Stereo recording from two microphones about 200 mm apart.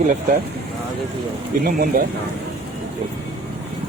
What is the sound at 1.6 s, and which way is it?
Speech, 45° right (ahead or behind).